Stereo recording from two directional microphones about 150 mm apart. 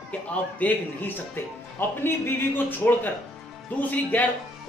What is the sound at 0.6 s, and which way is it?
Speech, 10° left (ahead or behind).